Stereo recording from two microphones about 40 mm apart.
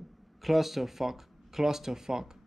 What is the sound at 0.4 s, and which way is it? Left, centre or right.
Speech, centre.